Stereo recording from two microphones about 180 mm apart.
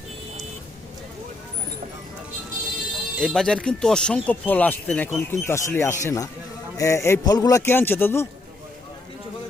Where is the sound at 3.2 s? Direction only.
5° left (ahead or behind).